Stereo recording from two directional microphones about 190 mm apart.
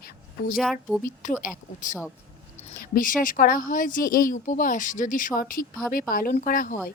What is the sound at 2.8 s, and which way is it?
Speech, 45° left (ahead or behind).